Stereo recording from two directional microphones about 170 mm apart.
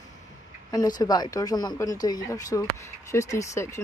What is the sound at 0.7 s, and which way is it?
Speech, 20° left (ahead or behind).